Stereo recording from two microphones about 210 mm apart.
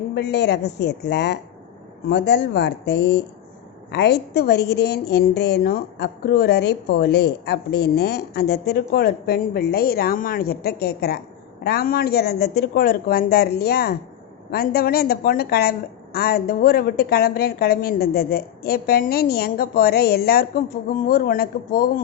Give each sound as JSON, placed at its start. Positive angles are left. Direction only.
{"t": 0.1, "sound": "a woman's voice", "side_deg": 55}